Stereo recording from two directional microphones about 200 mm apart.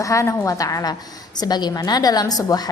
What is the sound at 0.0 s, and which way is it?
A woman's voice, 15° left (ahead or behind).